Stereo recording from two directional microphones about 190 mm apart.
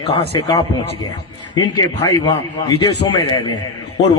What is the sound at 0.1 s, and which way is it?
A man's voice, 20° left (ahead or behind).